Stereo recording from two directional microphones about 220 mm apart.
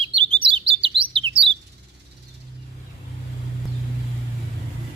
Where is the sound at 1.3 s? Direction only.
25° right (ahead or behind).